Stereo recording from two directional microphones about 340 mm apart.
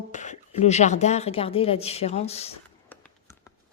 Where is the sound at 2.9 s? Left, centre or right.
Centre.